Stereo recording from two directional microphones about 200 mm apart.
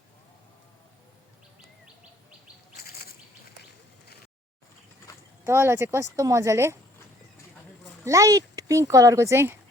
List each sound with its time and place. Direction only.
2.7 s insect: 50° left (ahead or behind)
5.5 s speech: 10° right (ahead or behind)
8.0 s speech: 15° right (ahead or behind)